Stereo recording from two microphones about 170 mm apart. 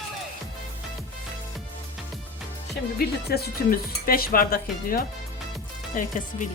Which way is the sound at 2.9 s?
70° left (ahead or behind).